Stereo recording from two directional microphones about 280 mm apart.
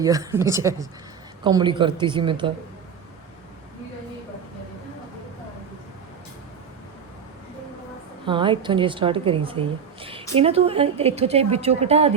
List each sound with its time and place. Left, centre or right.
0.0 s a woman's voice: centre
8.3 s speech: centre